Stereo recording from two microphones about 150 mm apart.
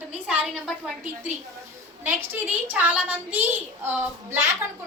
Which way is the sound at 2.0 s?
15° right (ahead or behind).